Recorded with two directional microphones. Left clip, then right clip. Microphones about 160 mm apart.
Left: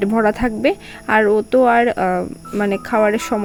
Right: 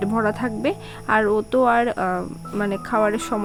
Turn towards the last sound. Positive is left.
turn(degrees=15)  # may be behind; listen again after turning